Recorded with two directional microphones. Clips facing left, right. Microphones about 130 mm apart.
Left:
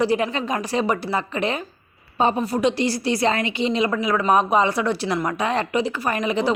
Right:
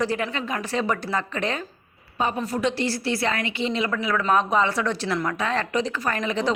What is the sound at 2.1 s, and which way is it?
Speech, 25° left (ahead or behind).